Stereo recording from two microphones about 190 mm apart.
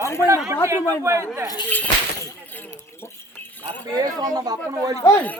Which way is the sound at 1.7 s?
10° left (ahead or behind).